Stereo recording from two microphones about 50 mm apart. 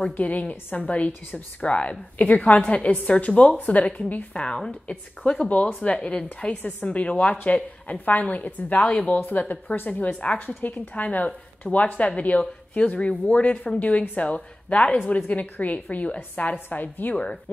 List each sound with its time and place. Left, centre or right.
0.0 s a woman's voice: left
6.4 s a woman's voice: left
16.5 s a woman's voice: left
17.1 s a woman's voice: left